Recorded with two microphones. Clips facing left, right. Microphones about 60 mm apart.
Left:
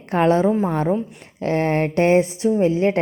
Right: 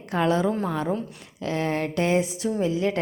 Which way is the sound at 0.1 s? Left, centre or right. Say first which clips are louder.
Left 6 dB; left.